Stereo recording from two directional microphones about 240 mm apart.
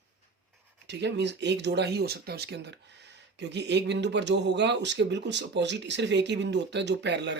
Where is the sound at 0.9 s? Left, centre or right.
Right.